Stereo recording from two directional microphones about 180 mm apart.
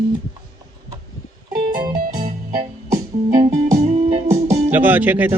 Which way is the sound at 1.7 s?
20° right (ahead or behind).